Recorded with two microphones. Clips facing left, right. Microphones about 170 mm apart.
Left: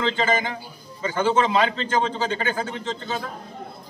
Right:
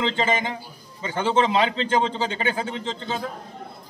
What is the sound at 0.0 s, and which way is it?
A man's voice, 25° right (ahead or behind).